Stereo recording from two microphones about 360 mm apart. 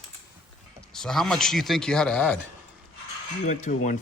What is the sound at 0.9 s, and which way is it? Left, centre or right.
Speech, centre.